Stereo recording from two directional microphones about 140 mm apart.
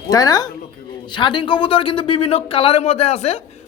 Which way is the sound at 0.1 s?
25° left (ahead or behind).